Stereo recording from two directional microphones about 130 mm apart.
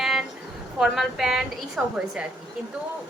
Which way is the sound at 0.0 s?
Centre (ahead or behind).